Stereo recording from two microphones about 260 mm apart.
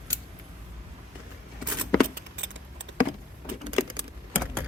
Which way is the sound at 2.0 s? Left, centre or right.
Right.